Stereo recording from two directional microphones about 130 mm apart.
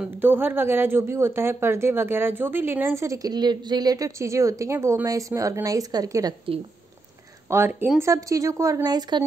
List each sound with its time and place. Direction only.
0.0 s speech: 15° right (ahead or behind)
7.4 s speech: 20° right (ahead or behind)